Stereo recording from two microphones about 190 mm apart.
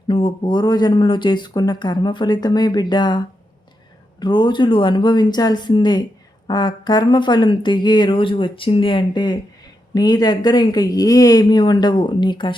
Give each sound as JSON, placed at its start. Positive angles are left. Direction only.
{"t": 0.1, "sound": "speech", "side_deg": 25}
{"t": 4.2, "sound": "speech", "side_deg": 25}